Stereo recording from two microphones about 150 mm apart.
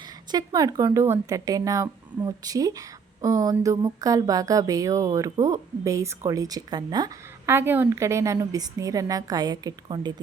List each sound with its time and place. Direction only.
0.3 s speech: 25° right (ahead or behind)
7.4 s speech: 15° right (ahead or behind)